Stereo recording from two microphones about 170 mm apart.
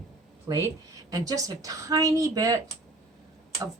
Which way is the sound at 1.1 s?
20° right (ahead or behind).